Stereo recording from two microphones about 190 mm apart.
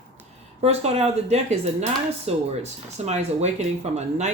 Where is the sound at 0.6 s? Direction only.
35° right (ahead or behind).